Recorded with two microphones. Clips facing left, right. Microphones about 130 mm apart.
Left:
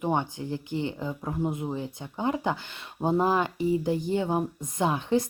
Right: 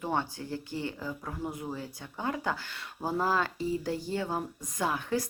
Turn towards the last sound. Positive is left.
turn(degrees=20)  # may be behind; listen again after turning